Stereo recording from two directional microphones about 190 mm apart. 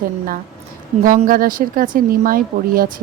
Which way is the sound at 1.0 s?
45° right (ahead or behind).